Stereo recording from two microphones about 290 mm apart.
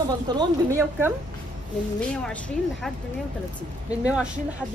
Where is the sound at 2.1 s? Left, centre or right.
Centre.